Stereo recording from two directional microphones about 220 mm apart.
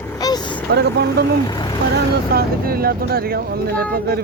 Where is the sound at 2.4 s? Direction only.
45° right (ahead or behind).